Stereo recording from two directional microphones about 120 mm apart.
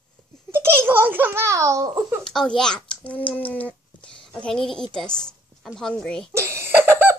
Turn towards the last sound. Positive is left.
turn(degrees=-20)  # may be behind; listen again after turning